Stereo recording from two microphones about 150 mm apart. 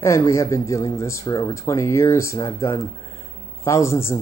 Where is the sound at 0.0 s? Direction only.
20° left (ahead or behind).